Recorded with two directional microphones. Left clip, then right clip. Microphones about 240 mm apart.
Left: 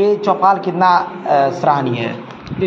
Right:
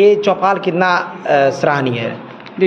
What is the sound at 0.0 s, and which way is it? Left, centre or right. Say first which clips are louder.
A man's voice: right 2 dB; right.